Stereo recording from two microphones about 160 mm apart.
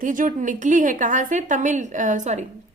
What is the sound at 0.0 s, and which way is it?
A woman's voice, 55° right (ahead or behind).